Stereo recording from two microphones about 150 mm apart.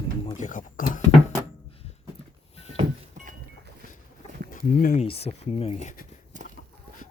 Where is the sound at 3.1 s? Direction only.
60° right (ahead or behind).